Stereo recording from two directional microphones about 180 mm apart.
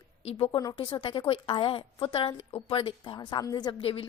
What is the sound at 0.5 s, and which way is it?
A woman's voice, 20° left (ahead or behind).